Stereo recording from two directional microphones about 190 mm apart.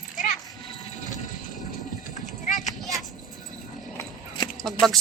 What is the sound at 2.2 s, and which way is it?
Clip-clop, 40° left (ahead or behind).